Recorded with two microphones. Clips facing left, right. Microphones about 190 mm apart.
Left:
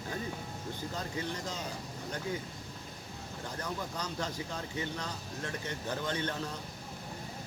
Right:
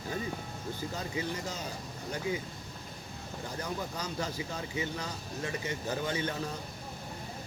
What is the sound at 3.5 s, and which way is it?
Speech, 10° right (ahead or behind).